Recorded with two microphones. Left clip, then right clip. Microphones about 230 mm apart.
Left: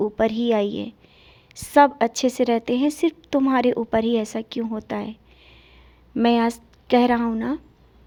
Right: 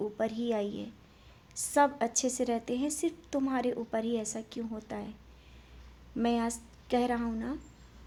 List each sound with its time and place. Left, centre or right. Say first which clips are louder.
0.0 s a woman's voice: left 12 dB; left
6.1 s a woman's voice: left 12 dB; left